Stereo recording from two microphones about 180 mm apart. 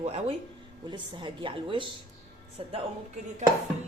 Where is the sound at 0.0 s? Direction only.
35° right (ahead or behind).